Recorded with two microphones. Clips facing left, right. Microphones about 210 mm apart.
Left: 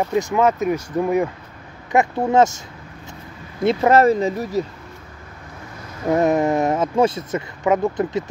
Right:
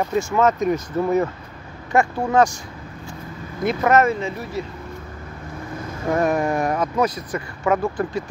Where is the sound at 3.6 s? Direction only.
30° left (ahead or behind).